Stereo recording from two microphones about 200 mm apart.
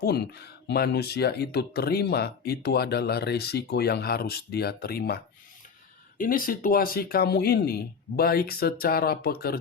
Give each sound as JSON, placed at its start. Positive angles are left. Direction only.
{"t": 0.0, "sound": "speech", "side_deg": 55}